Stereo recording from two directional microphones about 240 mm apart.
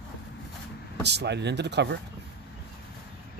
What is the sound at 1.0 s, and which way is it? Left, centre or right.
Speech, right.